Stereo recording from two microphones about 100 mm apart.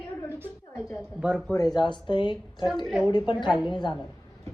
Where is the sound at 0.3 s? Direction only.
25° right (ahead or behind).